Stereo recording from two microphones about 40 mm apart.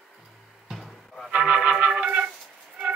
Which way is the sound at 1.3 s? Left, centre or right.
Right.